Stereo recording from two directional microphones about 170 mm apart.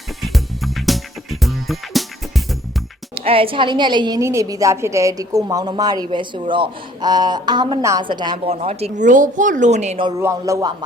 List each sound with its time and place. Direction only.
0.2 s music: centre (ahead or behind)
3.2 s a woman's voice: 35° right (ahead or behind)
10.2 s a woman's voice: 15° right (ahead or behind)